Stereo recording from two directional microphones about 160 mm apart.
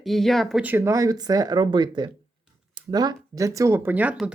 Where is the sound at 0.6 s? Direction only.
10° right (ahead or behind).